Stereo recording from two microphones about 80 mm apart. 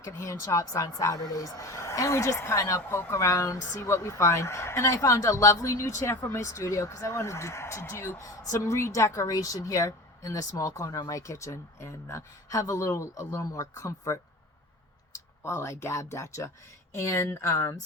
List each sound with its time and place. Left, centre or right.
0.0 s a woman's voice: left